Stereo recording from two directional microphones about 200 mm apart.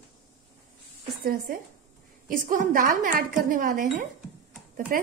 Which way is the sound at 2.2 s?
45° right (ahead or behind).